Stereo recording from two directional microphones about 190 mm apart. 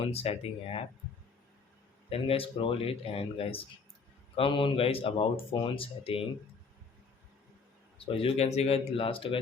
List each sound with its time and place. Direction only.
0.1 s a man's voice: 30° left (ahead or behind)
2.0 s speech: 30° left (ahead or behind)
8.0 s a man's voice: 30° left (ahead or behind)